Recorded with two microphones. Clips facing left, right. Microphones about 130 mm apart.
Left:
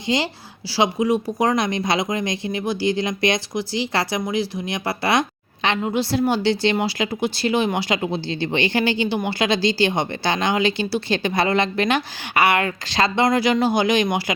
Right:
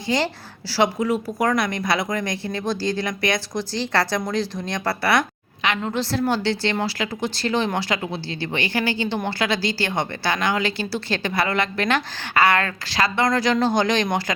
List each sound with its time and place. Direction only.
0.7 s speech: 15° left (ahead or behind)
3.5 s a woman's voice: 10° left (ahead or behind); by 5.9 s 25° left (ahead or behind)
5.9 s a woman's voice: 15° left (ahead or behind)